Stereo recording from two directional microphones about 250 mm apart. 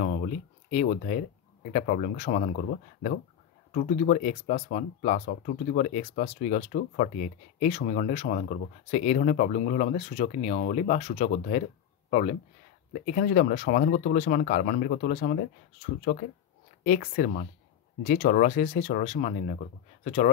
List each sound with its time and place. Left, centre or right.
0.0 s speech: left
17.0 s speech: left